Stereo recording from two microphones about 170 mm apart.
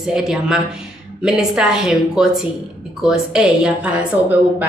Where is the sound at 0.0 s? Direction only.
Centre (ahead or behind).